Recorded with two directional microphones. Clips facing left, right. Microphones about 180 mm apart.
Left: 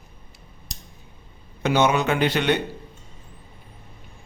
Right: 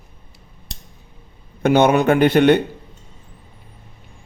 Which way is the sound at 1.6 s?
55° right (ahead or behind).